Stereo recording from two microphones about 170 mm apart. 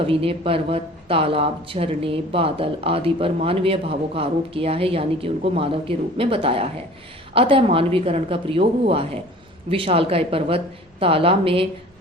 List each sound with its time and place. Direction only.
0.0 s speech: 35° right (ahead or behind)